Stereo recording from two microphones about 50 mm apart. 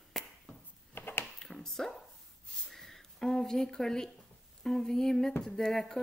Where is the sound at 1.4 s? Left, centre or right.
Centre.